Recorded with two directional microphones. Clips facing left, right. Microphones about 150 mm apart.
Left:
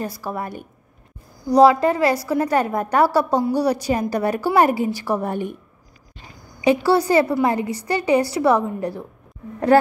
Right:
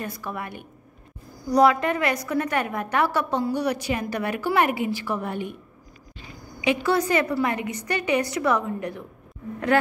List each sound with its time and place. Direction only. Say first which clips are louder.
0.0 s a woman's voice: left 5 dB; 35° left (ahead or behind)
6.6 s a woman's voice: left 5 dB; 35° left (ahead or behind)